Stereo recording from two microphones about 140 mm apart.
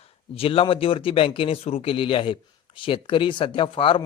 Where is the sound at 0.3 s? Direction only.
40° left (ahead or behind).